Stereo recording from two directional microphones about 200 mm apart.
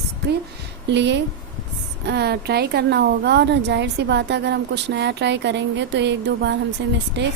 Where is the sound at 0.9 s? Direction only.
60° right (ahead or behind).